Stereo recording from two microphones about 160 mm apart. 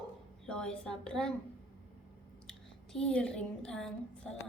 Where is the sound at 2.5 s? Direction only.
5° left (ahead or behind).